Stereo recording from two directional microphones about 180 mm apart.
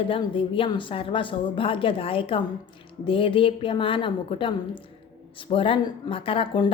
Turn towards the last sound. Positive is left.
turn(degrees=30)  # may be behind; listen again after turning